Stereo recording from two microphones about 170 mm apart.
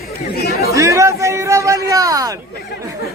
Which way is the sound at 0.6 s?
20° right (ahead or behind).